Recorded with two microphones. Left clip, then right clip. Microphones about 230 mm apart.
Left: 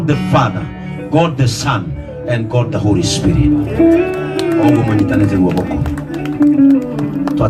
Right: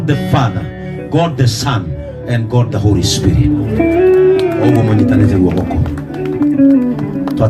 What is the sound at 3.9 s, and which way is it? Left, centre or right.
Music, left.